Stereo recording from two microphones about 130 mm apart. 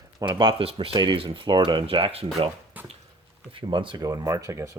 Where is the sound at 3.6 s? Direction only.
40° right (ahead or behind).